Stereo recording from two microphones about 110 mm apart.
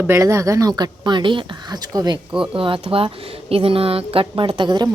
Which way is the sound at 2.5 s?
50° right (ahead or behind).